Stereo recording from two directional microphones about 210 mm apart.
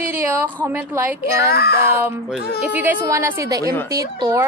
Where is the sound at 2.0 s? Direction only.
5° right (ahead or behind).